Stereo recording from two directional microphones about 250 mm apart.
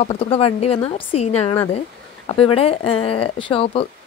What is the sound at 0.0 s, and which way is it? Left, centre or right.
A woman's voice, left.